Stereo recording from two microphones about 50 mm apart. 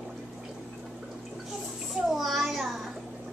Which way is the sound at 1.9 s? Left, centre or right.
Centre.